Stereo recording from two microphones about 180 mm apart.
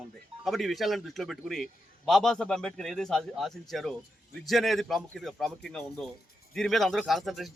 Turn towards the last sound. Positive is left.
turn(degrees=0)  # may be behind; listen again after turning